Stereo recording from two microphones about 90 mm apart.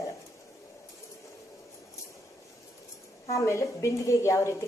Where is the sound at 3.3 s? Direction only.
35° left (ahead or behind).